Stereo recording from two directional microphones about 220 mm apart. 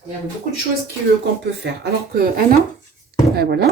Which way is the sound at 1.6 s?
45° right (ahead or behind).